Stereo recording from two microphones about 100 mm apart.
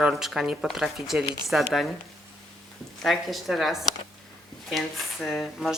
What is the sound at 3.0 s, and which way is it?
A woman's voice, centre (ahead or behind).